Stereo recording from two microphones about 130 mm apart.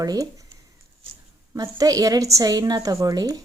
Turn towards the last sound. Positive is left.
turn(degrees=-30)  # may be behind; listen again after turning